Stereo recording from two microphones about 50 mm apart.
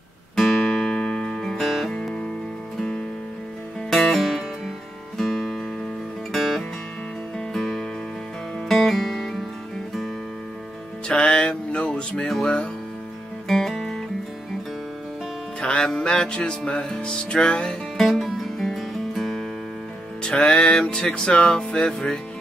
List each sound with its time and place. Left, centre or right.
0.4 s music: centre
1.6 s music: centre
3.9 s music: centre
11.1 s music: centre
12.3 s music: centre
15.6 s music: centre
17.9 s music: centre
20.2 s music: centre